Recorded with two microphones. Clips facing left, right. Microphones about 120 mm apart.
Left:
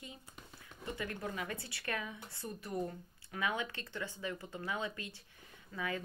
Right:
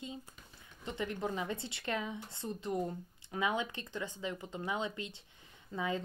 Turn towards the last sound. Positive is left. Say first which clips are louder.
# right 4 dB
turn(degrees=-25)  # may be behind; listen again after turning